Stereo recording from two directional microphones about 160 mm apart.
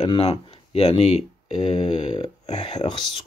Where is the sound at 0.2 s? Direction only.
40° left (ahead or behind).